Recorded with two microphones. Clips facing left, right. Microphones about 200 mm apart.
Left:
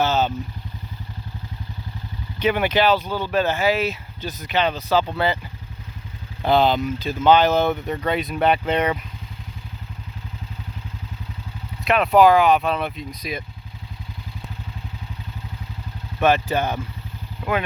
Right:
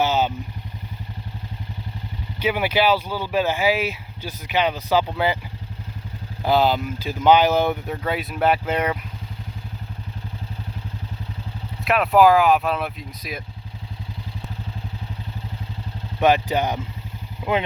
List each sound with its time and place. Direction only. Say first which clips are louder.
0.0 s vehicle: even; 10° right (ahead or behind)
2.4 s speech: left 1 dB; 10° right (ahead or behind)
6.4 s speech: left 1 dB; 5° right (ahead or behind)
11.9 s speech: left 1 dB; centre (ahead or behind)
16.2 s speech: right 1 dB; 15° right (ahead or behind)
17.4 s vehicle: right 1 dB; 10° right (ahead or behind)